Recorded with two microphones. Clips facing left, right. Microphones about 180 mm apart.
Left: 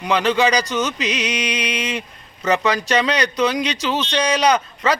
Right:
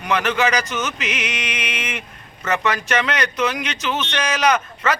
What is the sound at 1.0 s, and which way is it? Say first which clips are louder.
Speech: left 4 dB; 35° left (ahead or behind).